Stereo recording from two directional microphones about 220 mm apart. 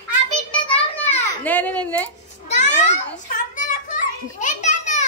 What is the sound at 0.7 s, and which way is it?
Children playing, 10° left (ahead or behind).